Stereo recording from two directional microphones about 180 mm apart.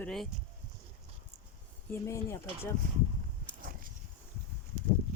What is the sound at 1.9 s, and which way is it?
Speech, 15° left (ahead or behind).